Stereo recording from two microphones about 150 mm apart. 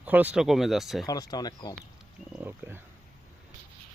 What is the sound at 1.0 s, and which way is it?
Speech, 25° left (ahead or behind).